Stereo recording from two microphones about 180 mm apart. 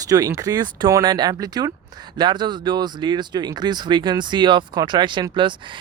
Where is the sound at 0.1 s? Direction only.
20° right (ahead or behind).